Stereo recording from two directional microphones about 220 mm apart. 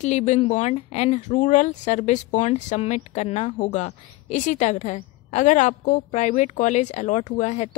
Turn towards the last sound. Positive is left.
turn(degrees=30)  # may be behind; listen again after turning